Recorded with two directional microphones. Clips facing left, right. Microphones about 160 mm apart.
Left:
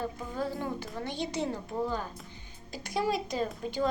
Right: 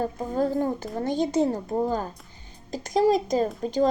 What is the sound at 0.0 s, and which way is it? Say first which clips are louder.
Speech: right 8 dB; 45° right (ahead or behind).